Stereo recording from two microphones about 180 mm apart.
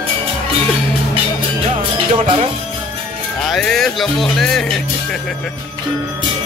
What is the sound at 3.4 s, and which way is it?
Speech, 5° left (ahead or behind).